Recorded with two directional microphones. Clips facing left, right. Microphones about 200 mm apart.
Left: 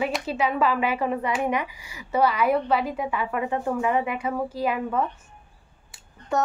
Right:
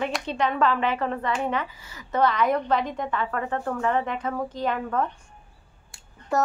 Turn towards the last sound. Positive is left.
turn(degrees=0)  # may be behind; listen again after turning